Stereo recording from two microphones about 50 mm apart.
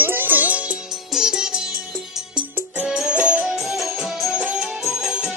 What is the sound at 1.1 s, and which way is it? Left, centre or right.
Music, centre.